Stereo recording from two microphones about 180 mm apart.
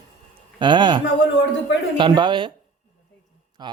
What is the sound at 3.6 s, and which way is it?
Speech, 25° right (ahead or behind).